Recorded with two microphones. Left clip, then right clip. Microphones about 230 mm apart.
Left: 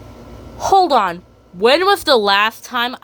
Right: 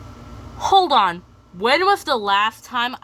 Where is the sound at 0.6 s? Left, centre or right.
Centre.